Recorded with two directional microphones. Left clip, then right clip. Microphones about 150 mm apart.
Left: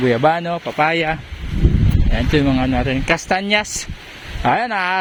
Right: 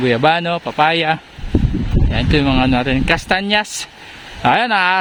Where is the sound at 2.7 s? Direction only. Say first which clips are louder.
Right 3 dB; 35° right (ahead or behind).